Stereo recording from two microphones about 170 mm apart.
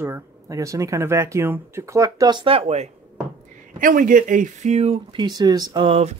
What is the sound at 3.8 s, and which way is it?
Speech, 55° right (ahead or behind).